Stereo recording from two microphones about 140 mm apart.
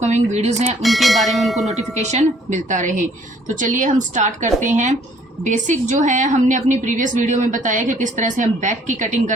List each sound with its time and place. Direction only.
0.0 s speech: 55° right (ahead or behind)
0.8 s speech: centre (ahead or behind)
1.6 s a woman's voice: 55° right (ahead or behind)